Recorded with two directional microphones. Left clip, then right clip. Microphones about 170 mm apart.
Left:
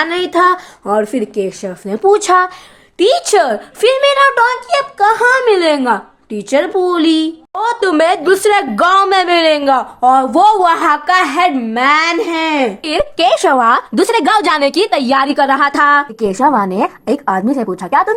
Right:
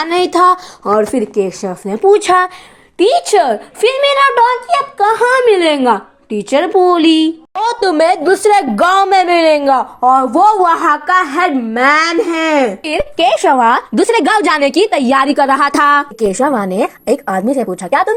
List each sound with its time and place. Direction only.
0.0 s a sound: 10° right (ahead or behind)
0.9 s a woman's voice: centre (ahead or behind)
3.0 s a woman's voice: 10° left (ahead or behind); by 13.0 s 10° right (ahead or behind)
13.0 s a woman's voice: 5° left (ahead or behind)
15.4 s music: 20° right (ahead or behind)
16.1 s a woman's voice: 40° right (ahead or behind)